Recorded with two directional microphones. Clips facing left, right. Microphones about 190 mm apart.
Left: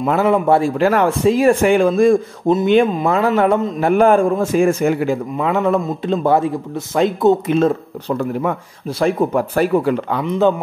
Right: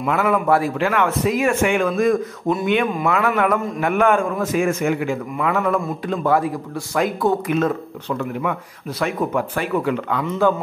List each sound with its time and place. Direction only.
0.0 s a man's voice: 30° left (ahead or behind)
0.7 s a man's voice: 35° left (ahead or behind)
10.2 s a man's voice: 20° left (ahead or behind)